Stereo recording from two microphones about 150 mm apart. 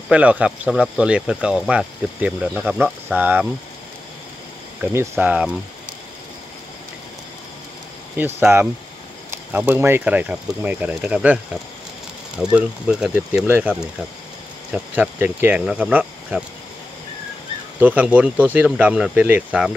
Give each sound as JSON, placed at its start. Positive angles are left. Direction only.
{"t": 0.1, "sound": "speech", "side_deg": -10}
{"t": 5.2, "sound": "speech", "side_deg": -10}
{"t": 8.4, "sound": "speech", "side_deg": -15}
{"t": 12.5, "sound": "speech", "side_deg": -10}
{"t": 17.7, "sound": "speech", "side_deg": -10}